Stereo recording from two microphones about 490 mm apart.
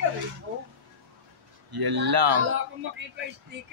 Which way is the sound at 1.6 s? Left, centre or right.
Right.